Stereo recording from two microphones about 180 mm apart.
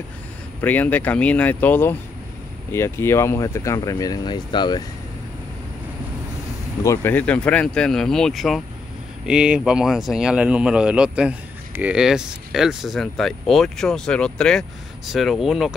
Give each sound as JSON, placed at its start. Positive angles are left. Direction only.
{"t": 0.6, "sound": "speech", "side_deg": 10}
{"t": 6.8, "sound": "speech", "side_deg": 15}